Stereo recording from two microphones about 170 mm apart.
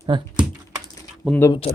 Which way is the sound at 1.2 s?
10° left (ahead or behind).